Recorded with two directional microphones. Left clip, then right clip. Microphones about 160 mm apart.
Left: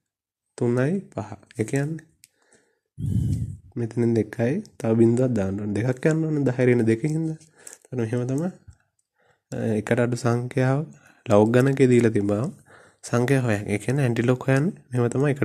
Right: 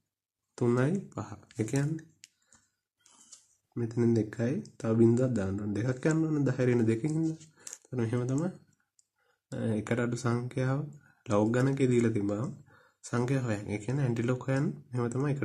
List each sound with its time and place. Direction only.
0.6 s speech: 25° left (ahead or behind)
3.7 s speech: 35° left (ahead or behind)
6.1 s speech: 20° left (ahead or behind)
6.4 s speech: 35° left (ahead or behind)
9.5 s speech: 45° left (ahead or behind)